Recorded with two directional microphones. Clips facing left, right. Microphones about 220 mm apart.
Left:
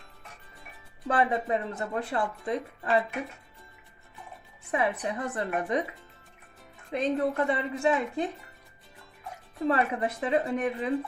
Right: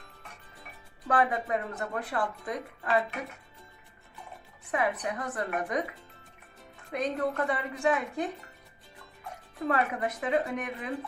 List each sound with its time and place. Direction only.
1.0 s speech: 25° left (ahead or behind)
4.7 s speech: 25° left (ahead or behind)
6.9 s speech: 25° left (ahead or behind)
9.6 s speech: 30° left (ahead or behind)